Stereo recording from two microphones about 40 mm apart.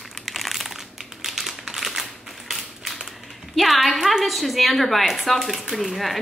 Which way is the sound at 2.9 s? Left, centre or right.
Centre.